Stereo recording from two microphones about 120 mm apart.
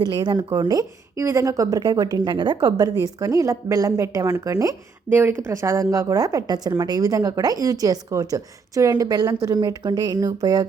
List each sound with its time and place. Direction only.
0.0 s a woman's voice: 40° right (ahead or behind)
5.0 s a woman's voice: 15° right (ahead or behind); by 10.7 s 30° right (ahead or behind)